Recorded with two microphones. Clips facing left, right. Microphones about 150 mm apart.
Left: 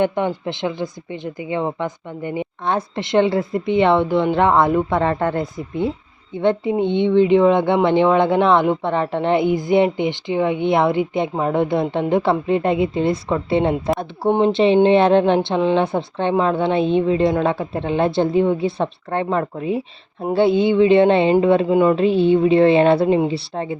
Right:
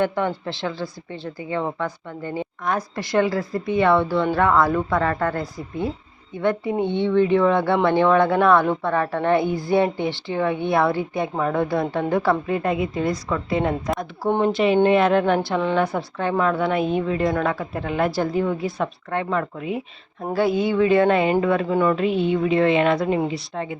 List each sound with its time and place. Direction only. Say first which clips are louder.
0.0 s speech: left 3 dB; 20° left (ahead or behind)